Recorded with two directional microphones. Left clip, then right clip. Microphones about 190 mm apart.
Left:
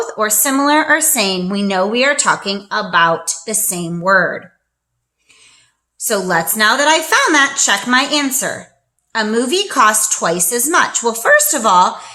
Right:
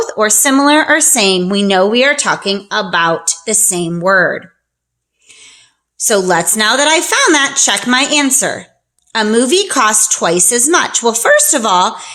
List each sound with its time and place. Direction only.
0.0 s a woman's voice: 35° right (ahead or behind)
5.3 s a sound: 40° right (ahead or behind)
6.1 s a woman's voice: 40° right (ahead or behind)